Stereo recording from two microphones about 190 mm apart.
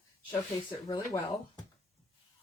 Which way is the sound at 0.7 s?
20° left (ahead or behind).